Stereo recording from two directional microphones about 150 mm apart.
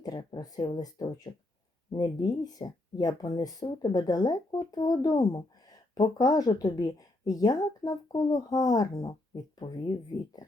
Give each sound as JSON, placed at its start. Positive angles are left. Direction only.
{"t": 0.0, "sound": "speech", "side_deg": 30}